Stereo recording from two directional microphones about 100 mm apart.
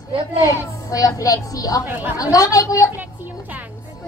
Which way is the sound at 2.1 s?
35° left (ahead or behind).